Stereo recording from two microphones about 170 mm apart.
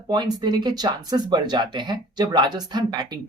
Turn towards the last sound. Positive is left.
turn(degrees=-25)  # may be behind; listen again after turning